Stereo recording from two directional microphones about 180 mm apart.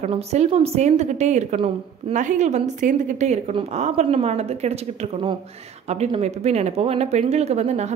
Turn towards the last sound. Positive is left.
turn(degrees=-35)  # may be behind; listen again after turning